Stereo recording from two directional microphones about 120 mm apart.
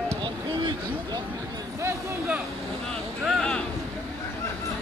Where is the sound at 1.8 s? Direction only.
20° right (ahead or behind).